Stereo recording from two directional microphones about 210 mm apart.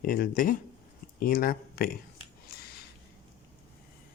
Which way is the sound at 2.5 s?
50° left (ahead or behind).